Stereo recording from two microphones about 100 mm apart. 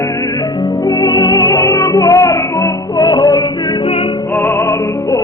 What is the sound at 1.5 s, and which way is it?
Music, 30° left (ahead or behind).